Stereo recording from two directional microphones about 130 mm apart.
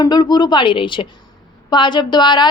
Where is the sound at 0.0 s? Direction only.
30° left (ahead or behind).